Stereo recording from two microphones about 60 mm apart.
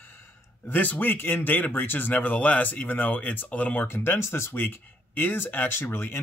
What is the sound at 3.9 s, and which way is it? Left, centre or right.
Speech, left.